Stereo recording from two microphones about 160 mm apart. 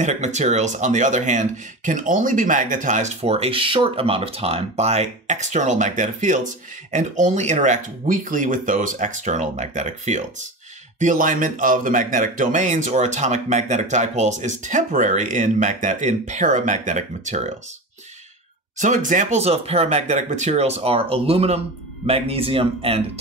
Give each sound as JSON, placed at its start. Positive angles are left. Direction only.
{"t": 0.0, "sound": "speech", "side_deg": -45}
{"t": 18.8, "sound": "speech", "side_deg": -55}